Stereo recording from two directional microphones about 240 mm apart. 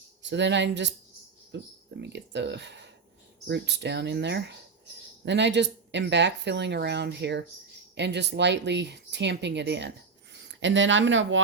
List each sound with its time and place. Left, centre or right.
0.2 s speech: right